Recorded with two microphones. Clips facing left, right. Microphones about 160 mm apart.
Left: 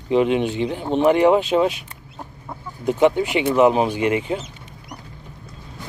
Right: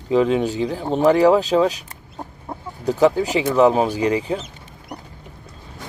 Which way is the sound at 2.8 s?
35° right (ahead or behind).